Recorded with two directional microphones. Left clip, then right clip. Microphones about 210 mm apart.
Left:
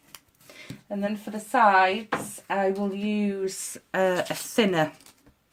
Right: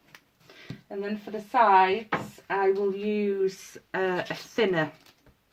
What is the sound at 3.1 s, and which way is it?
Speech, 50° left (ahead or behind).